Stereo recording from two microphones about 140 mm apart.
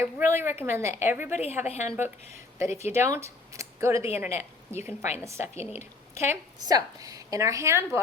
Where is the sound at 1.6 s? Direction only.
55° left (ahead or behind).